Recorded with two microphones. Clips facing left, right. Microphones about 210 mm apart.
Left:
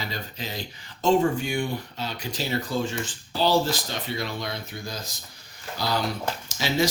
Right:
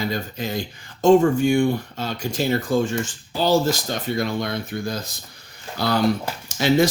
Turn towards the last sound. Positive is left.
turn(degrees=-55)  # may be behind; listen again after turning